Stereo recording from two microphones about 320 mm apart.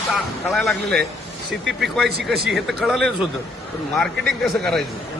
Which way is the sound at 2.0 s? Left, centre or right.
Right.